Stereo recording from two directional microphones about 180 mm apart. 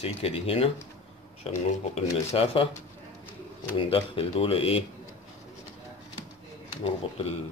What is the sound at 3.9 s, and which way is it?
Speech, 30° left (ahead or behind).